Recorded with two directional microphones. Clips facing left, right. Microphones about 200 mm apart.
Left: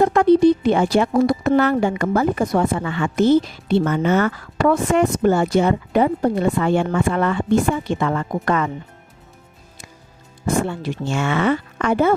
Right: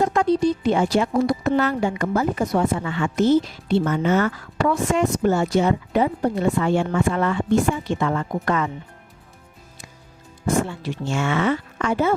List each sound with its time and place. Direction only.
0.0 s speech: 60° left (ahead or behind)
10.7 s speech: 60° left (ahead or behind)